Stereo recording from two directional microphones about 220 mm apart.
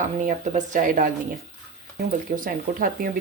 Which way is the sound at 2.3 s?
40° right (ahead or behind).